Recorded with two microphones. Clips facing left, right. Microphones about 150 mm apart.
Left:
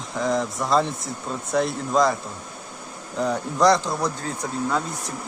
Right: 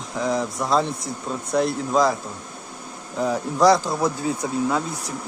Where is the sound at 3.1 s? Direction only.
Centre (ahead or behind).